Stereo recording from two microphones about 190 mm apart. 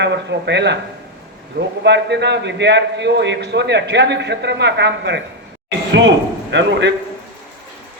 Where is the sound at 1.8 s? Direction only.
65° right (ahead or behind).